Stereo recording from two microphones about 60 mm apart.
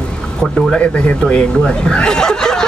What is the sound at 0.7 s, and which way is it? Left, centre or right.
Speech, left.